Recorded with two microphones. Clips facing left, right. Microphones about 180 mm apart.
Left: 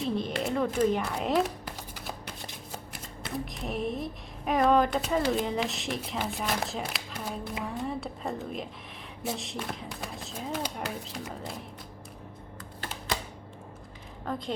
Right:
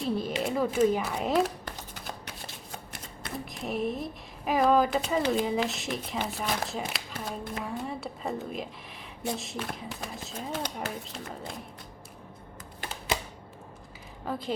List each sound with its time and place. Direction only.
0.0 s a sound: 5° right (ahead or behind)
2.9 s speech: centre (ahead or behind)
14.3 s speech: 5° right (ahead or behind)